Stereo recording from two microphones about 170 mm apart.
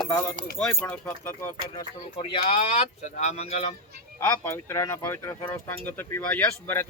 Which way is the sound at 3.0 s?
45° left (ahead or behind).